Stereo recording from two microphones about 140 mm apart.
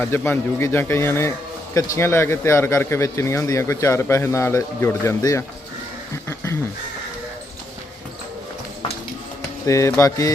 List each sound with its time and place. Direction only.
0.0 s a man's voice: 15° left (ahead or behind)
6.2 s a sound: 20° left (ahead or behind)
9.6 s a man's voice: 20° left (ahead or behind)